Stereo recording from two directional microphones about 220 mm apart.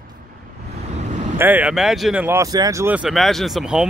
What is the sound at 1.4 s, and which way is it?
Speech, 5° right (ahead or behind).